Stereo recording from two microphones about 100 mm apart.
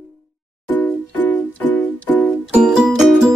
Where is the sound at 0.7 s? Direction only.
15° left (ahead or behind).